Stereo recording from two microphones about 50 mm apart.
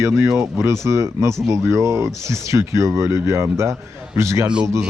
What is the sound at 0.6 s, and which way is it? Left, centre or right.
Speech, right.